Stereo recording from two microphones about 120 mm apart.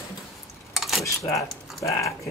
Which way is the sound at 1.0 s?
25° left (ahead or behind).